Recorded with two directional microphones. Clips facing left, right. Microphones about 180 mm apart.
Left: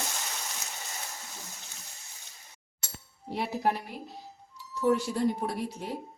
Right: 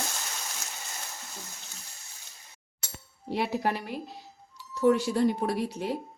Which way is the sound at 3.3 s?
90° right.